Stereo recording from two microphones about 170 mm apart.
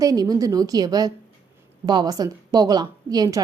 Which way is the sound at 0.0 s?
20° right (ahead or behind).